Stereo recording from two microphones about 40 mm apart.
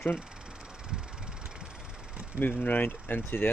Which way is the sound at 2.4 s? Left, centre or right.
Left.